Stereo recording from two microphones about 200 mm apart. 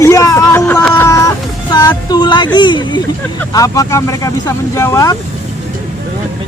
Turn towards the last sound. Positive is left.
turn(degrees=15)  # may be behind; listen again after turning